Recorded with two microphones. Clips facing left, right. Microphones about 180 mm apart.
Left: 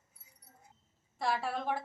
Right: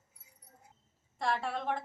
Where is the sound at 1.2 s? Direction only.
5° left (ahead or behind).